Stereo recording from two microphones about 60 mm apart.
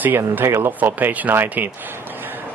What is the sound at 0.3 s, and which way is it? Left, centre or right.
Speech, right.